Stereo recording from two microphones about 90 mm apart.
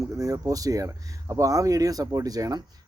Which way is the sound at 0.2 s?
40° right (ahead or behind).